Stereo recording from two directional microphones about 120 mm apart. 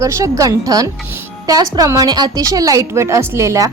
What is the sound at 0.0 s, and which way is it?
A woman's voice, 25° right (ahead or behind).